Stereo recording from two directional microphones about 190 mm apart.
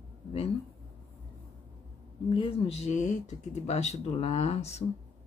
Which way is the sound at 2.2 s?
25° left (ahead or behind).